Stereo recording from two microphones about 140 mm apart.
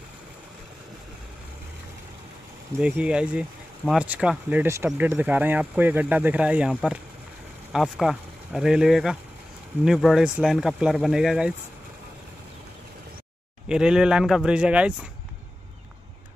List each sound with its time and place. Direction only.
2.8 s speech: 5° right (ahead or behind)
13.7 s speech: 5° right (ahead or behind)